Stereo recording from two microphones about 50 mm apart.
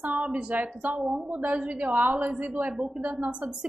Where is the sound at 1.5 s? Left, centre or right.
Right.